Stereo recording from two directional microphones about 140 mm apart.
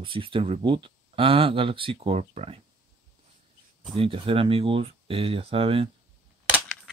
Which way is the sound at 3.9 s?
40° right (ahead or behind).